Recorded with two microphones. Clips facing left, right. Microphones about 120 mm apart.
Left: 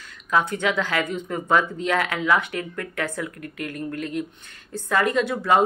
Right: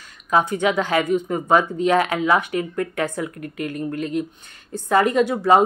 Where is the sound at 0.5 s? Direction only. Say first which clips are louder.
Right 4 dB; 15° right (ahead or behind).